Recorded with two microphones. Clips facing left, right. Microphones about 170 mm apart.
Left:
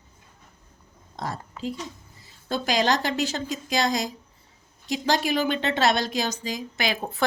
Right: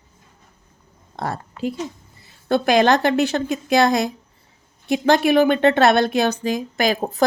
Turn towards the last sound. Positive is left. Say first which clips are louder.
# right 8 dB
turn(degrees=-40)  # may be behind; listen again after turning